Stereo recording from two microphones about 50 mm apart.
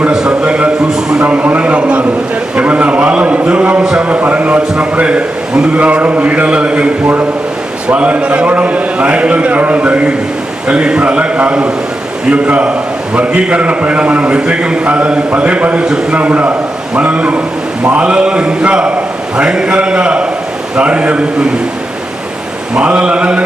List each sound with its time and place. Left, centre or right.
0.1 s a sound: right
1.2 s a man's voice: right
7.9 s a man's voice: right
22.7 s a man's voice: right